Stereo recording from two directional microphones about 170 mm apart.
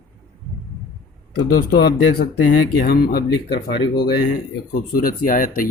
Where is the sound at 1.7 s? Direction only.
70° left (ahead or behind).